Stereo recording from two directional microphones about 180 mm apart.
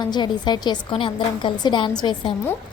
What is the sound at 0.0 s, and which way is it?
A woman's voice, 25° left (ahead or behind).